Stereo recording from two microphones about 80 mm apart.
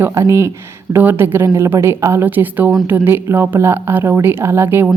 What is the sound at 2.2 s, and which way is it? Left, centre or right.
A woman's voice, right.